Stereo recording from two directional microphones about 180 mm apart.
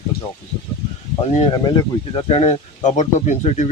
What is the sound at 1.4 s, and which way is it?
Speech, 25° left (ahead or behind).